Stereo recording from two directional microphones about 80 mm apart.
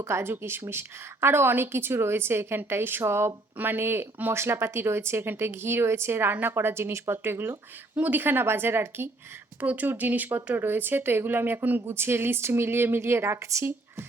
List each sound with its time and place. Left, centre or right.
0.0 s a woman's voice: right